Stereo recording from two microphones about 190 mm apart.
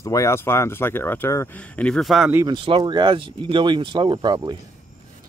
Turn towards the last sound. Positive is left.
turn(degrees=-25)  # may be behind; listen again after turning